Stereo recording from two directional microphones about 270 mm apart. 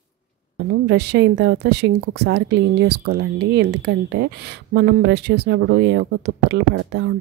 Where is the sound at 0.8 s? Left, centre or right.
Right.